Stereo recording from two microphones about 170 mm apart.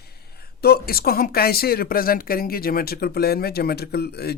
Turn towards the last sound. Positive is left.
turn(degrees=70)  # may be behind; listen again after turning